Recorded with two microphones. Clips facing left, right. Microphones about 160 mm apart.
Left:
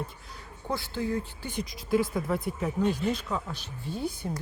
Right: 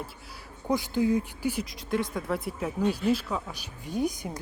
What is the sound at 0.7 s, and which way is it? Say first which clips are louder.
Speech: right 6 dB; 15° right (ahead or behind).